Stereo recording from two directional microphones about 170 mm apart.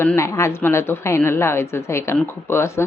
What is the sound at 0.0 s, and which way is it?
A woman's voice, 15° left (ahead or behind).